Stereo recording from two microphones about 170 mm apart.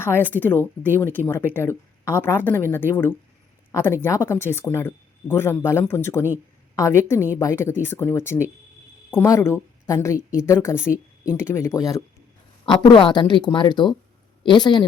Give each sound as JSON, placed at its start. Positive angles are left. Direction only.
{"t": 0.0, "sound": "speech", "side_deg": 10}